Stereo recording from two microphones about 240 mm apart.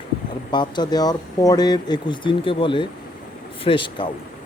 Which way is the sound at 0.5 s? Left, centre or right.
Centre.